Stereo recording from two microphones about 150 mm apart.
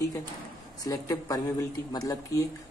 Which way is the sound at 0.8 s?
25° left (ahead or behind).